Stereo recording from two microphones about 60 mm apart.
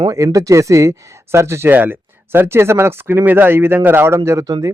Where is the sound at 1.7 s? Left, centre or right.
Right.